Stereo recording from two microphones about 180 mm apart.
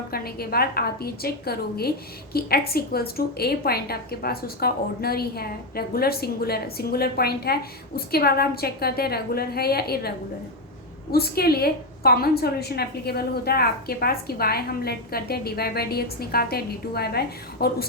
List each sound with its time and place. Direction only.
0.1 s a woman's voice: 60° left (ahead or behind)
11.1 s a woman's voice: 60° left (ahead or behind)